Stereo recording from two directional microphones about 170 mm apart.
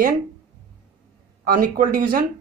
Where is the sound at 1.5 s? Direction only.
55° right (ahead or behind).